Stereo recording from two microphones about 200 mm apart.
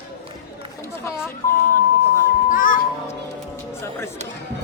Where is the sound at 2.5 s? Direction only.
45° left (ahead or behind).